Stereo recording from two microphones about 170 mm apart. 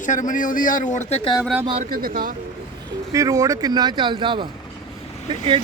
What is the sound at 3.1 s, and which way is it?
Speech, 20° right (ahead or behind).